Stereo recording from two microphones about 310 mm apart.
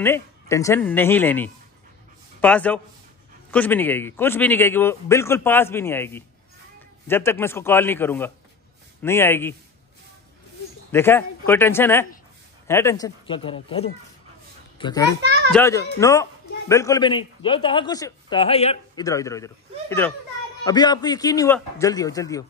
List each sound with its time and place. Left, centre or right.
0.0 s a man's voice: centre
10.9 s a man's voice: centre